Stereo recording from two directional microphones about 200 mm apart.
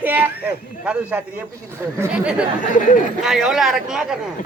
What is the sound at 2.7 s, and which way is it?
Speech, 40° left (ahead or behind).